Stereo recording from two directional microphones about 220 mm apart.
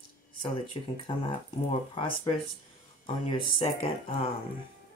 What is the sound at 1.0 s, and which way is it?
Speech, 25° left (ahead or behind).